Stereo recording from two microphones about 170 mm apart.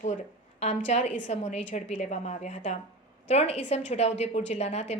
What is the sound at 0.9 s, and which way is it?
A woman's voice, 40° left (ahead or behind).